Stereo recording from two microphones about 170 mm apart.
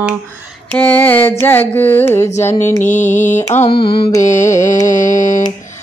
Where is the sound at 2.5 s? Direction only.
45° left (ahead or behind).